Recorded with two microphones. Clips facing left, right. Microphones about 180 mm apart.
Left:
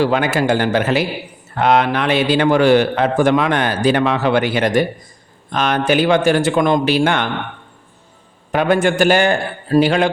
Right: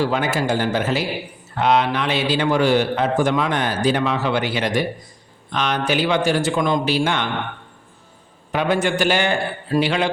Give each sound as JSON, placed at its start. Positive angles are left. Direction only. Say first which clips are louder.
{"t": 0.0, "sound": "a man's voice", "louder": "left 4 dB", "side_deg": 70}
{"t": 1.5, "sound": "a man's voice", "louder": "left 3 dB", "side_deg": 55}
{"t": 8.5, "sound": "a man's voice", "louder": "left 5 dB", "side_deg": 50}